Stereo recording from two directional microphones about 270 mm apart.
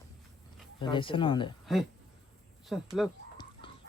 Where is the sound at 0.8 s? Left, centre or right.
Centre.